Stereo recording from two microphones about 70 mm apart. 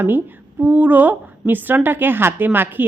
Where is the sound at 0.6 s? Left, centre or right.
Right.